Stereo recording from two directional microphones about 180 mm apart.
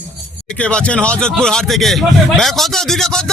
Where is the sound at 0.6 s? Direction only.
5° left (ahead or behind).